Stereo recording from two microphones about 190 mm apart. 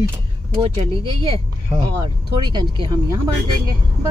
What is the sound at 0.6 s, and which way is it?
Speech, 30° right (ahead or behind).